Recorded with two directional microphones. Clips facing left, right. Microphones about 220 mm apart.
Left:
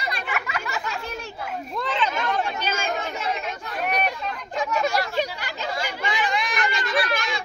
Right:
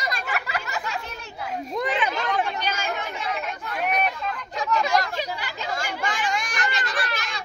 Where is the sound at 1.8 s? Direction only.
15° right (ahead or behind).